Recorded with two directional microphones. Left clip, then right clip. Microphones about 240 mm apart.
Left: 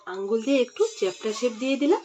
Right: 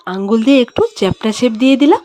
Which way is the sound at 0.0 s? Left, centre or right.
Right.